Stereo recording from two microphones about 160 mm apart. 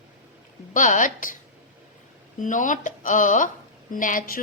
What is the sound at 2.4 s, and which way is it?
A woman's voice, 55° left (ahead or behind).